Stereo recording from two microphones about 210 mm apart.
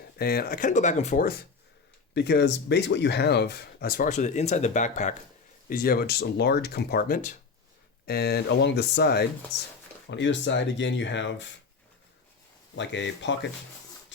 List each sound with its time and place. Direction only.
0.2 s speech: 50° left (ahead or behind)
8.0 s speech: 50° left (ahead or behind)
12.7 s speech: 60° left (ahead or behind)